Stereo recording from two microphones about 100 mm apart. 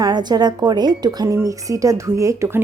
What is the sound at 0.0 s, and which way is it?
A woman's voice, 45° right (ahead or behind).